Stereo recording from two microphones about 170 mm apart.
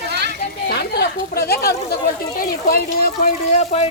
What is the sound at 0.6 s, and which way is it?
Speech, 70° left (ahead or behind).